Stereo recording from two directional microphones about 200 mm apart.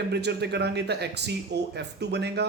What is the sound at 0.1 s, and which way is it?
Speech, 60° right (ahead or behind).